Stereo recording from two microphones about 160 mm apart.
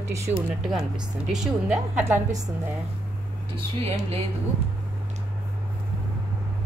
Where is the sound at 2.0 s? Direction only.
15° right (ahead or behind).